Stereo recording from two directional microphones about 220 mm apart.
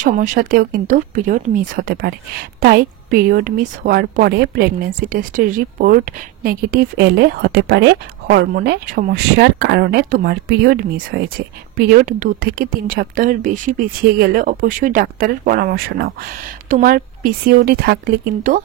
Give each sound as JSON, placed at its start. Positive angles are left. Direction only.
{"t": 0.0, "sound": "speech", "side_deg": -40}